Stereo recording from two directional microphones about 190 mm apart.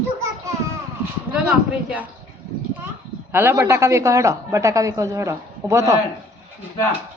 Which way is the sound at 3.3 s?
15° right (ahead or behind).